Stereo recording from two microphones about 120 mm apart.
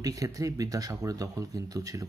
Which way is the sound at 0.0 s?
30° right (ahead or behind).